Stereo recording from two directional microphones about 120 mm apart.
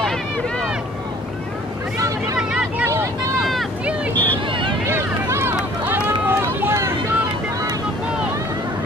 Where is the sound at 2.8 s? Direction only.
20° right (ahead or behind).